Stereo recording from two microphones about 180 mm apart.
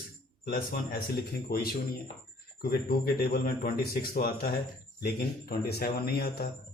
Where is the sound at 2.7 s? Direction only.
60° left (ahead or behind).